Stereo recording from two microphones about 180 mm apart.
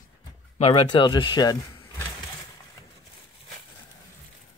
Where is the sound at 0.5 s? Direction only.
30° left (ahead or behind).